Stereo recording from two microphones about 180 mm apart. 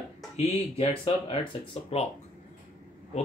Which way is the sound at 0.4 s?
35° left (ahead or behind).